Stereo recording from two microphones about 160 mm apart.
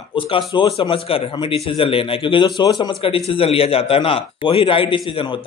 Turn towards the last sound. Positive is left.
turn(degrees=30)  # may be behind; listen again after turning